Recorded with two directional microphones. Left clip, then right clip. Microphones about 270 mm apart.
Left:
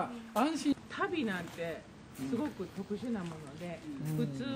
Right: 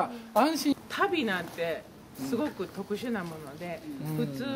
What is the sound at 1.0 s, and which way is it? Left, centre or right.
Speech, centre.